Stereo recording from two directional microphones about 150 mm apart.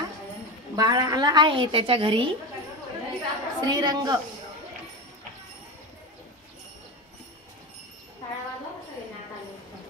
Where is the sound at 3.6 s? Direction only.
30° right (ahead or behind).